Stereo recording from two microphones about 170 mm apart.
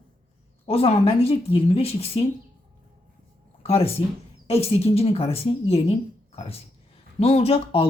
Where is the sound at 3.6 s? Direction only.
35° left (ahead or behind).